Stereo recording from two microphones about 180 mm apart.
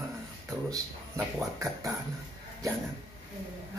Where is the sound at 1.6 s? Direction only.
15° right (ahead or behind).